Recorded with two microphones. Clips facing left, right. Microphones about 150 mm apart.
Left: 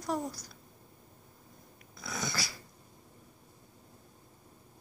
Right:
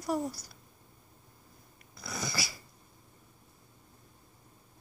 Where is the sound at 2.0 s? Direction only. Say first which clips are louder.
Even; centre (ahead or behind).